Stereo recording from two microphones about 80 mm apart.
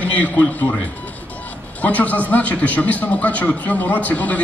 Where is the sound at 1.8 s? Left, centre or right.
Centre.